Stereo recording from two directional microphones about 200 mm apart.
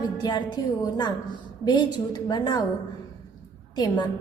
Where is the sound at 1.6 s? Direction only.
20° left (ahead or behind).